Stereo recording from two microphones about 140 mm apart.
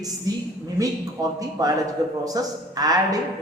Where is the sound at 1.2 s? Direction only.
25° right (ahead or behind).